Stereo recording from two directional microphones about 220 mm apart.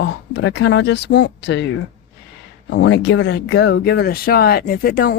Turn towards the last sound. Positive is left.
turn(degrees=45)  # may be behind; listen again after turning